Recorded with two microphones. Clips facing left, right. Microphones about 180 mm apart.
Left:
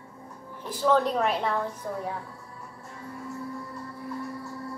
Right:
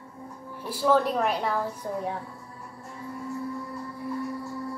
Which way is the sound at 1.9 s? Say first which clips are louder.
Right 2 dB; 25° right (ahead or behind).